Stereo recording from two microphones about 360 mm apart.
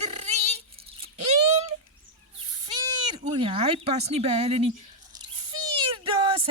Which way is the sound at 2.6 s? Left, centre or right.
Centre.